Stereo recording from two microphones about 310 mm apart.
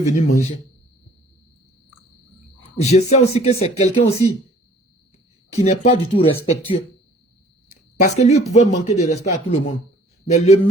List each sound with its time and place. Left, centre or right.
0.0 s speech: left
2.6 s speech: left
5.5 s speech: left
8.0 s speech: left